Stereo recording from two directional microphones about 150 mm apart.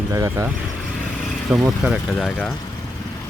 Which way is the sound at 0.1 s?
20° right (ahead or behind).